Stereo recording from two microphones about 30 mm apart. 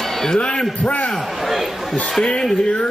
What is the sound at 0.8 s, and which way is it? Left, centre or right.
Speech, left.